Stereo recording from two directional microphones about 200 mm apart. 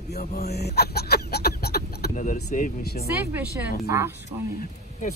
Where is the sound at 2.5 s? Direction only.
45° left (ahead or behind).